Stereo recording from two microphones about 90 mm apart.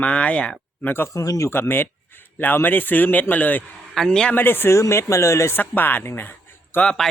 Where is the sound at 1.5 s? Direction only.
25° left (ahead or behind).